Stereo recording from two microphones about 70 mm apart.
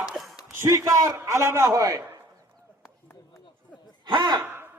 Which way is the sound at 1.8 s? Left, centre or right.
Right.